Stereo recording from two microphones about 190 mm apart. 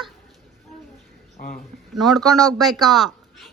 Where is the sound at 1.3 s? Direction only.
50° left (ahead or behind).